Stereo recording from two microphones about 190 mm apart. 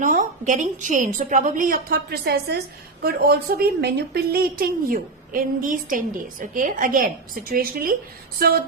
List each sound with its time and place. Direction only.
0.0 s a woman's voice: 45° right (ahead or behind)